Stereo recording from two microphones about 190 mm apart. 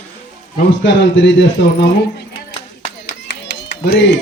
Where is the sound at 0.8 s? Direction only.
75° left (ahead or behind).